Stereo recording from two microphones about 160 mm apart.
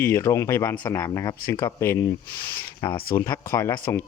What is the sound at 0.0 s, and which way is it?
A man's voice, 15° left (ahead or behind).